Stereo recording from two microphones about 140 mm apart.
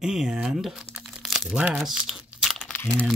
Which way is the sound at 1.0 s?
Centre (ahead or behind).